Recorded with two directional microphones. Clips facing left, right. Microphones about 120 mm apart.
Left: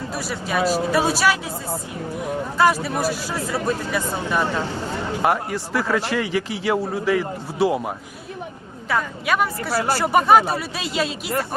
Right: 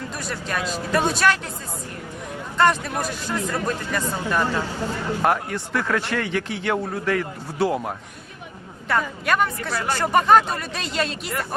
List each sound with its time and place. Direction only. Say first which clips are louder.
0.1 s a man's voice: left 6 dB; 5° left (ahead or behind)
2.6 s a man's voice: left 1 dB; 5° left (ahead or behind)
9.7 s speech: left 6 dB; 35° left (ahead or behind)
10.0 s a man's voice: even; 10° left (ahead or behind)